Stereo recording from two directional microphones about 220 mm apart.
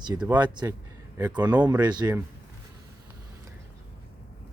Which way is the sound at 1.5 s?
5° right (ahead or behind).